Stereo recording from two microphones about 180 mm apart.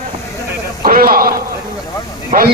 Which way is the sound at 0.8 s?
55° right (ahead or behind).